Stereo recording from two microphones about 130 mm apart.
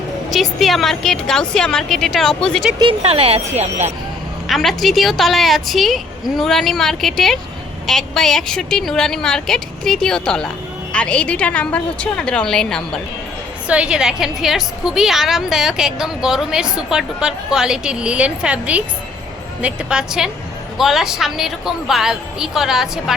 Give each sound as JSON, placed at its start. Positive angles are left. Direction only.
{"t": 0.3, "sound": "a woman's voice", "side_deg": 0}
{"t": 3.0, "sound": "speech", "side_deg": -50}
{"t": 4.4, "sound": "a woman's voice", "side_deg": 0}
{"t": 13.7, "sound": "a woman's voice", "side_deg": -10}